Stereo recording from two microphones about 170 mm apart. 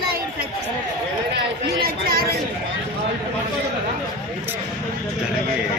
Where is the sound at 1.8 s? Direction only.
60° right (ahead or behind).